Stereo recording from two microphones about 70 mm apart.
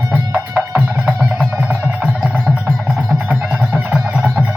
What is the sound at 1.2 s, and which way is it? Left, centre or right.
Music, centre.